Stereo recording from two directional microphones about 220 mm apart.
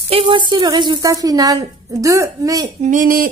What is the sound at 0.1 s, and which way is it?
A woman's voice, 25° right (ahead or behind).